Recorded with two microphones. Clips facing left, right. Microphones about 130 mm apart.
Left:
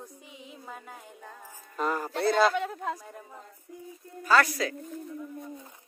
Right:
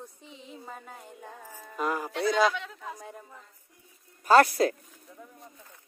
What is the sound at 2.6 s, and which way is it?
Speech, 50° left (ahead or behind).